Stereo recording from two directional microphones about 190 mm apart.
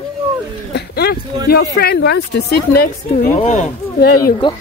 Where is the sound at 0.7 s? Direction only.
55° left (ahead or behind).